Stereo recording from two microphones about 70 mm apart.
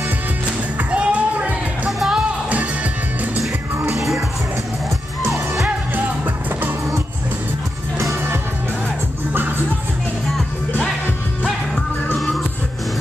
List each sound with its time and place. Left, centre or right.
0.7 s music: centre
1.9 s music: centre
9.3 s music: right